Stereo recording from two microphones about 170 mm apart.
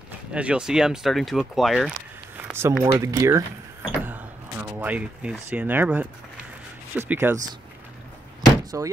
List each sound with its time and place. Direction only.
0.3 s speech: 5° right (ahead or behind)
2.3 s a sound: 10° right (ahead or behind)
3.0 s speech: 20° right (ahead or behind)
4.0 s a sound: 10° right (ahead or behind)
4.6 s speech: 10° right (ahead or behind)
8.7 s speech: 20° right (ahead or behind)